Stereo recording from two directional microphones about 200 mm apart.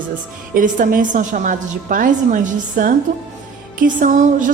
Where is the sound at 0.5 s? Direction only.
45° right (ahead or behind).